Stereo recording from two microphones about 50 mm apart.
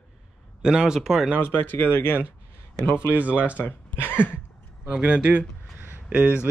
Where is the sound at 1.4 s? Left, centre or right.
Left.